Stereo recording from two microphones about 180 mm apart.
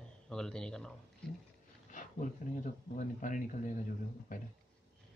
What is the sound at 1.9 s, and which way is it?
Speech, 45° left (ahead or behind).